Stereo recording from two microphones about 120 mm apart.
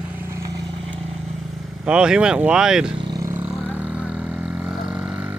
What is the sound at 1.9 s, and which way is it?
Speech, 10° right (ahead or behind).